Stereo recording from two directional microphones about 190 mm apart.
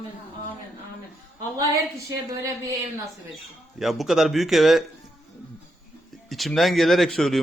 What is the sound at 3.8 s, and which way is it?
A man's voice, centre (ahead or behind).